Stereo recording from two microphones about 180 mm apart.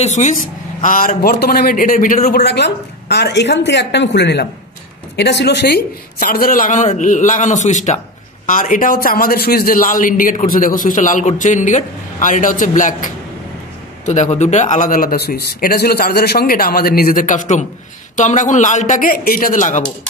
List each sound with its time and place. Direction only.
0.0 s a man's voice: 40° left (ahead or behind)